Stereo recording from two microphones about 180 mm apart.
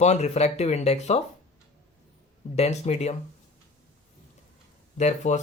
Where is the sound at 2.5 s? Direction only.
35° left (ahead or behind).